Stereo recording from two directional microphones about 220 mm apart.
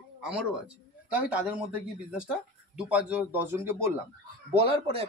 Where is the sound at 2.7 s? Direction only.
5° right (ahead or behind).